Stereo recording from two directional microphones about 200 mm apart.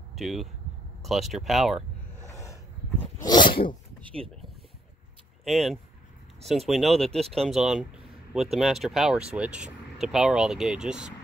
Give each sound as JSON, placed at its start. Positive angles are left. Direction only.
{"t": 0.1, "sound": "speech", "side_deg": 0}
{"t": 2.2, "sound": "a sound", "side_deg": 15}
{"t": 3.3, "sound": "sneeze", "side_deg": 25}
{"t": 4.0, "sound": "speech", "side_deg": -25}
{"t": 5.4, "sound": "speech", "side_deg": 0}